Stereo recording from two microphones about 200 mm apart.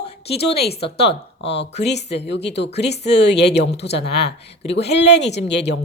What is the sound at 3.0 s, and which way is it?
Speech, 60° left (ahead or behind).